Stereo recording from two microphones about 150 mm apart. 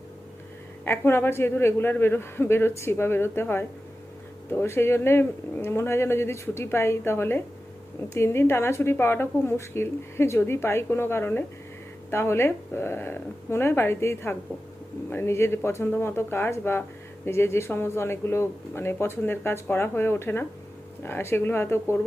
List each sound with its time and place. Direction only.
0.9 s speech: 15° left (ahead or behind)